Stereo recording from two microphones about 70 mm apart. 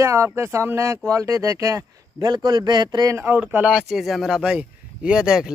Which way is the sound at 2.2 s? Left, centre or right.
Right.